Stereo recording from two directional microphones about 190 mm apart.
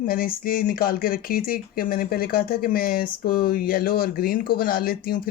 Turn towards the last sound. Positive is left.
turn(degrees=50)  # may be behind; listen again after turning